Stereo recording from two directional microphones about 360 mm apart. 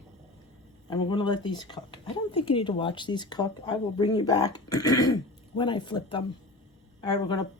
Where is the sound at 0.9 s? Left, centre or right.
Centre.